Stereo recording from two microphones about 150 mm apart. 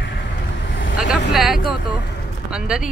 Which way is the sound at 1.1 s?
Centre (ahead or behind).